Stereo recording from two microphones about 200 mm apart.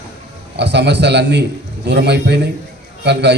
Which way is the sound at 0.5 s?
60° right (ahead or behind).